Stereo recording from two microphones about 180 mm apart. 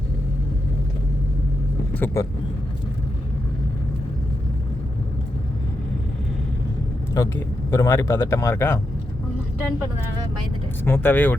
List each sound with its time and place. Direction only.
1.9 s vehicle: 10° left (ahead or behind)
7.1 s speech: 20° left (ahead or behind)
10.8 s speech: 10° left (ahead or behind)